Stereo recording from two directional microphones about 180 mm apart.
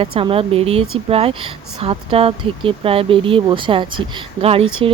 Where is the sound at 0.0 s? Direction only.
30° right (ahead or behind).